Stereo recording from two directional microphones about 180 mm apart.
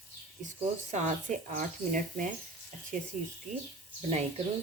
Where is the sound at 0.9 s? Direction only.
40° right (ahead or behind).